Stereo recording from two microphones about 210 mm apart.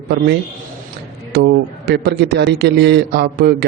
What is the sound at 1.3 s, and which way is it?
A man's voice, 50° right (ahead or behind).